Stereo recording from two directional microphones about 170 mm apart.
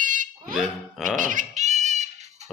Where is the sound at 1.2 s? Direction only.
50° right (ahead or behind).